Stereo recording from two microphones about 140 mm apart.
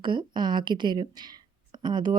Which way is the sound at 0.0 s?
35° right (ahead or behind).